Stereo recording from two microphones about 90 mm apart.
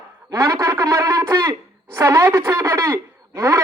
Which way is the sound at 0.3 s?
35° right (ahead or behind).